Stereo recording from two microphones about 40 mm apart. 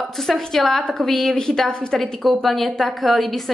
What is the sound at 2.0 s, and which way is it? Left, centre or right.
A woman's voice, centre.